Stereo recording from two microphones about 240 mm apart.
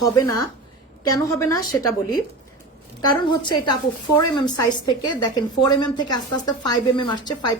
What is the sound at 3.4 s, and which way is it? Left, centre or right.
A woman's voice, centre.